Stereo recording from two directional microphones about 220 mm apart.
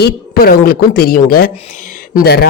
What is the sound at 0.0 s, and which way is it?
Speech, 45° left (ahead or behind).